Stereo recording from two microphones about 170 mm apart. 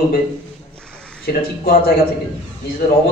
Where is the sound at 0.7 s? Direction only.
5° left (ahead or behind).